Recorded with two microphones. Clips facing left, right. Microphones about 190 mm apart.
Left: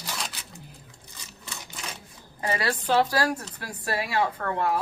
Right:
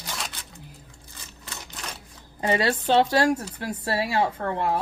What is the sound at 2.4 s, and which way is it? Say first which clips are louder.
Speech: right 4 dB; 25° right (ahead or behind).